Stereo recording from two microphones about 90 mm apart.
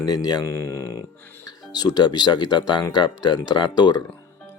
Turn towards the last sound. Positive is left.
turn(degrees=50)  # may be behind; listen again after turning